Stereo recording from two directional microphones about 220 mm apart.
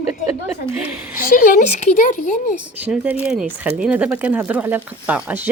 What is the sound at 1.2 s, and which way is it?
Speech, 40° left (ahead or behind).